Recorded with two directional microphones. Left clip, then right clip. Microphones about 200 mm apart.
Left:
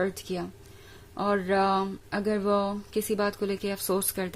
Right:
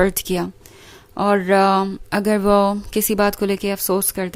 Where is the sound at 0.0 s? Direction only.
40° right (ahead or behind).